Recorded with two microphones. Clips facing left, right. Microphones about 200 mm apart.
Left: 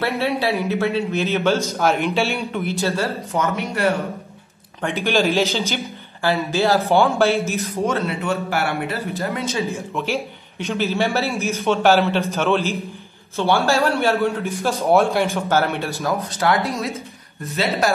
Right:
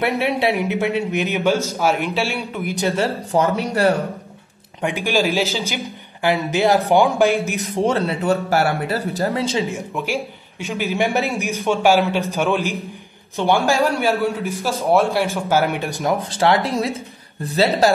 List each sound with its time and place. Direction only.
0.0 s a man's voice: 20° right (ahead or behind); by 2.7 s 5° right (ahead or behind)
2.7 s a man's voice: 20° right (ahead or behind)
3.3 s speech: 30° right (ahead or behind)
4.8 s a man's voice: 10° right (ahead or behind)
6.2 s a man's voice: 15° right (ahead or behind)
7.7 s speech: 30° right (ahead or behind)
9.7 s a man's voice: 10° right (ahead or behind)
14.4 s a man's voice: centre (ahead or behind); by 16.2 s 15° right (ahead or behind)
16.2 s speech: 30° right (ahead or behind)